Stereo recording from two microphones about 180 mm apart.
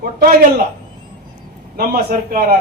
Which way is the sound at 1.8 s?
55° right (ahead or behind).